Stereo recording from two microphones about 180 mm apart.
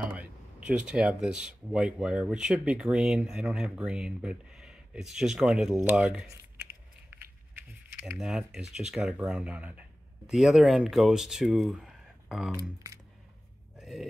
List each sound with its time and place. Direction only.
0.1 s speech: 5° right (ahead or behind)
7.5 s speech: 10° right (ahead or behind)
12.5 s speech: 20° right (ahead or behind)
13.7 s oink: centre (ahead or behind)